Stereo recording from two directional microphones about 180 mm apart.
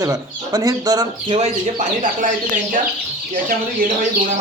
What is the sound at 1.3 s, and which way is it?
Speech, 40° right (ahead or behind).